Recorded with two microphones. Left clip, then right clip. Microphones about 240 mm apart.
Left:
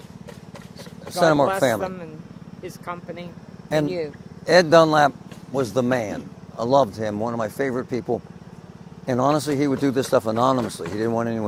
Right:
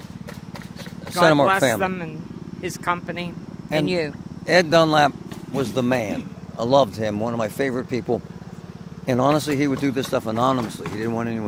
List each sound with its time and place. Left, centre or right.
1.2 s a man's voice: centre
1.8 s speech: right
4.4 s a man's voice: left
9.9 s a man's voice: left